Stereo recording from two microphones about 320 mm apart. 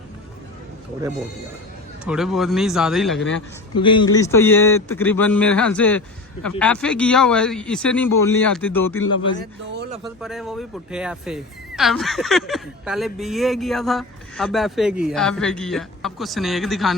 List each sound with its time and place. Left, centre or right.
2.0 s speech: centre
3.8 s a man's voice: centre
9.4 s speech: right
10.0 s speech: centre